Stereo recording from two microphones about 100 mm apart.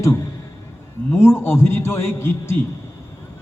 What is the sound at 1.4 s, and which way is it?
A man's voice, 25° left (ahead or behind).